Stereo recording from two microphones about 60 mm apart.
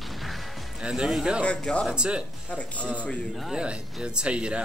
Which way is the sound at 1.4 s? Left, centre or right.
Centre.